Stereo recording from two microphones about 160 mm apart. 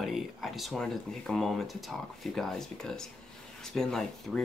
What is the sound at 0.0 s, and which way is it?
Speech, centre (ahead or behind).